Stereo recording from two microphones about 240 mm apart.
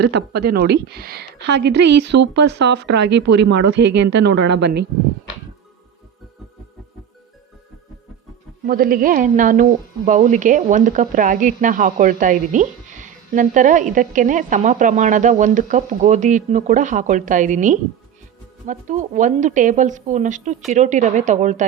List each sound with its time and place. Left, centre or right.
0.0 s speech: right
8.6 s a woman's voice: right